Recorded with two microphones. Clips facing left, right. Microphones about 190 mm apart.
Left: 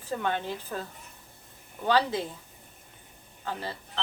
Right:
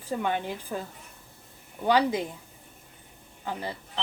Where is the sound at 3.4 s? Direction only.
15° right (ahead or behind).